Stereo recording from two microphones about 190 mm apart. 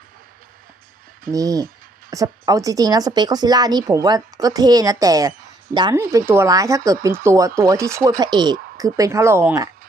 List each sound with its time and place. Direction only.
1.3 s speech: 20° right (ahead or behind)